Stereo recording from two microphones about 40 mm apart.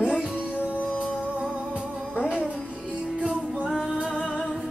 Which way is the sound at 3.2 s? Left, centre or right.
Right.